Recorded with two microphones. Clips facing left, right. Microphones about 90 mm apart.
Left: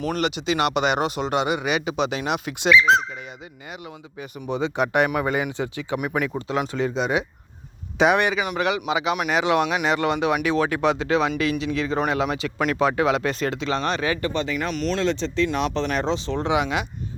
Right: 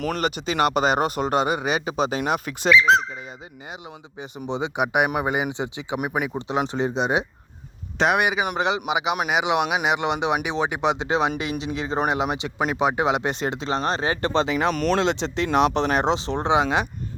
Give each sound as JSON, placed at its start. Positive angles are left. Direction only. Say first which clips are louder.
{"t": 0.2, "sound": "speech", "louder": "even", "side_deg": -45}
{"t": 4.2, "sound": "speech", "louder": "left 1 dB", "side_deg": -20}
{"t": 7.9, "sound": "speech", "louder": "left 2 dB", "side_deg": 0}
{"t": 8.2, "sound": "speech", "louder": "even", "side_deg": -15}
{"t": 8.5, "sound": "speech", "louder": "even", "side_deg": -25}
{"t": 14.7, "sound": "speech", "louder": "right 3 dB", "side_deg": -50}
{"t": 15.0, "sound": "speech", "louder": "left 1 dB", "side_deg": -85}
{"t": 15.4, "sound": "speech", "louder": "right 4 dB", "side_deg": -60}
{"t": 16.0, "sound": "speech", "louder": "right 2 dB", "side_deg": -25}